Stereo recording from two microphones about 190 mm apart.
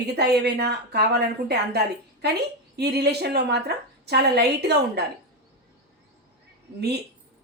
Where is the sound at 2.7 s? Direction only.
60° right (ahead or behind).